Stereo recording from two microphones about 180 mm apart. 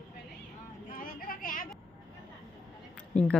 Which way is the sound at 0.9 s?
50° left (ahead or behind).